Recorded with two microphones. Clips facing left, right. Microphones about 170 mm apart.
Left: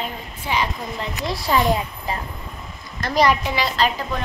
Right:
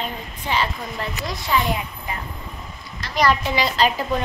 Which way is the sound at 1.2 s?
35° left (ahead or behind).